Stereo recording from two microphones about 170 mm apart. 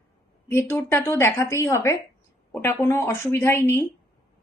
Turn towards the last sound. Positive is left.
turn(degrees=15)  # may be behind; listen again after turning